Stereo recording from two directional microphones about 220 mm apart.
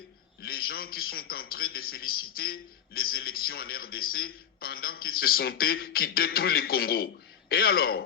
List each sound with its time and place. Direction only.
0.4 s a man's voice: 45° left (ahead or behind)